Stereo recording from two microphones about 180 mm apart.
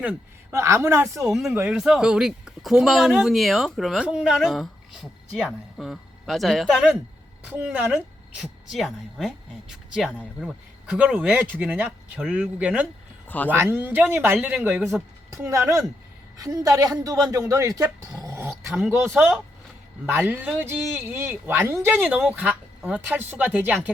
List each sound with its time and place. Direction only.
0.0 s a woman's voice: 10° right (ahead or behind)
1.3 s a woman's voice: centre (ahead or behind)
13.2 s speech: 10° left (ahead or behind)
13.5 s a woman's voice: 15° right (ahead or behind)